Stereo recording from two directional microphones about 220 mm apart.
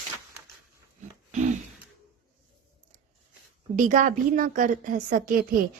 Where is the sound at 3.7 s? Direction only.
35° right (ahead or behind).